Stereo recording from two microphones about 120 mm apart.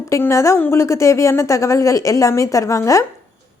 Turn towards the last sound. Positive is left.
turn(degrees=25)  # may be behind; listen again after turning